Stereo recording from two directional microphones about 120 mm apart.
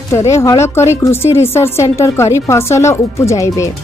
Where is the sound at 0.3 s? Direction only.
25° left (ahead or behind).